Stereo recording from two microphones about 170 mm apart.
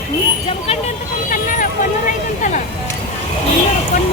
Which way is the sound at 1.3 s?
50° left (ahead or behind).